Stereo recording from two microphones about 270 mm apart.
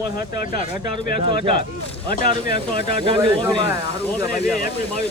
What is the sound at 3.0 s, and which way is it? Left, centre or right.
Speech, centre.